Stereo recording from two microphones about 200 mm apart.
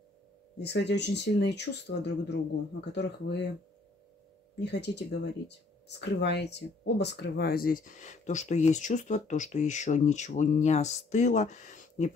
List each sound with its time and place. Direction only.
0.6 s speech: 55° left (ahead or behind)
4.6 s speech: 55° left (ahead or behind); by 12.1 s 35° left (ahead or behind)